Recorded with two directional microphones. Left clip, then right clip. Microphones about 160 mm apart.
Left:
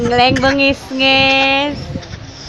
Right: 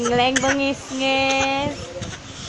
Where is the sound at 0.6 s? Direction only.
25° left (ahead or behind).